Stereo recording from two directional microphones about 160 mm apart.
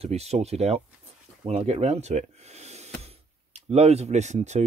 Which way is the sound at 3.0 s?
40° right (ahead or behind).